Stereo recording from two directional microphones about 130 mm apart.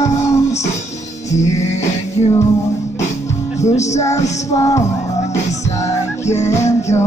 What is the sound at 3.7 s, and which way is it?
Music, 60° left (ahead or behind).